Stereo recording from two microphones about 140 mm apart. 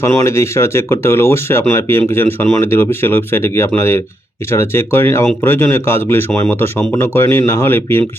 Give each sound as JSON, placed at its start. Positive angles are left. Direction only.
{"t": 0.0, "sound": "speech", "side_deg": 20}